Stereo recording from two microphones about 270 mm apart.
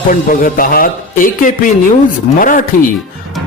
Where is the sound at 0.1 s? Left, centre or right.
Left.